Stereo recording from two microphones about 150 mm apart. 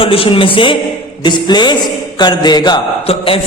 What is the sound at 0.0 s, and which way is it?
A man's voice, 40° left (ahead or behind).